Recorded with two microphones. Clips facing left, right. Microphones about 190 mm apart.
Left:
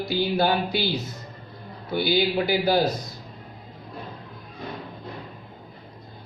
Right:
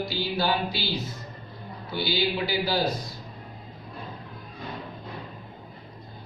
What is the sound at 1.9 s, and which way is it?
Speech, 50° left (ahead or behind).